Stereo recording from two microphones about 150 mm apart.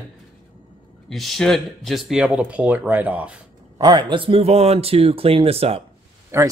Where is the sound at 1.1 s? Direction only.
Centre (ahead or behind).